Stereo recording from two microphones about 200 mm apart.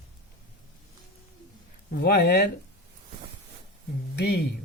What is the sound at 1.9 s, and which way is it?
Speech, 50° left (ahead or behind).